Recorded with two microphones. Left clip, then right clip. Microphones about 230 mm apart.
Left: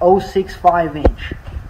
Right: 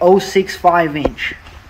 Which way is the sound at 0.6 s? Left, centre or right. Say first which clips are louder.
Even; right.